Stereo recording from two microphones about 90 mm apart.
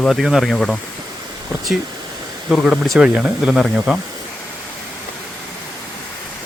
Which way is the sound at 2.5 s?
10° right (ahead or behind).